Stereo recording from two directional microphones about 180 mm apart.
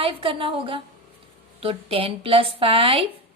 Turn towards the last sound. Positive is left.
turn(degrees=-30)  # may be behind; listen again after turning